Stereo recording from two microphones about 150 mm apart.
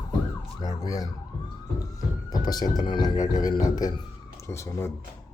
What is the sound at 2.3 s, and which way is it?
Speech, 25° left (ahead or behind).